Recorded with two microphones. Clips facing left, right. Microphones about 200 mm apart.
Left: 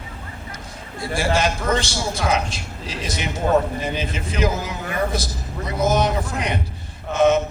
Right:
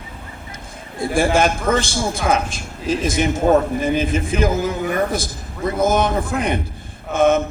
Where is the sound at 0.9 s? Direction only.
50° right (ahead or behind).